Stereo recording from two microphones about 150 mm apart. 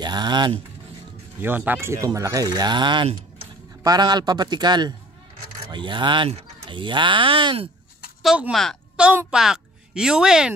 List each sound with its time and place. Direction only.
0.0 s speech: 30° right (ahead or behind)
1.4 s speech: 10° right (ahead or behind); by 7.7 s 35° right (ahead or behind)
8.2 s a woman's voice: 5° right (ahead or behind)